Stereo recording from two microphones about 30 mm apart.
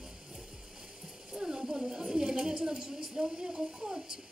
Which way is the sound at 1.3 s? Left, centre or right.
Right.